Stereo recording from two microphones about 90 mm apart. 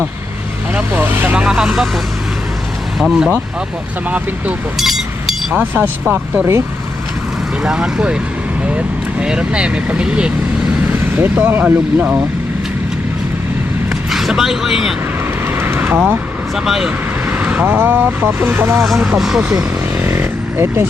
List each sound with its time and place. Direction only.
0.7 s speech: 20° right (ahead or behind)
1.5 s speech: 5° right (ahead or behind)
3.0 s speech: 5° right (ahead or behind)
4.8 s chink: centre (ahead or behind)
5.5 s speech: 15° right (ahead or behind)
7.6 s speech: 5° right (ahead or behind)
9.2 s speech: 10° right (ahead or behind)
10.8 s speech: 20° right (ahead or behind)
14.1 s speech: 5° right (ahead or behind)
15.4 s vehicle: 25° right (ahead or behind)
16.6 s speech: 5° right (ahead or behind)
17.2 s speech: 15° right (ahead or behind)
19.0 s speech: 5° right (ahead or behind)
20.0 s vehicle: 25° right (ahead or behind)